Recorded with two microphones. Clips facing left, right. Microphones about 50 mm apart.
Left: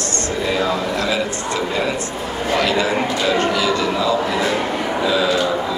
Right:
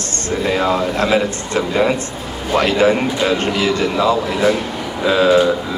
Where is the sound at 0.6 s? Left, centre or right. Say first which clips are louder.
Right 3 dB; right.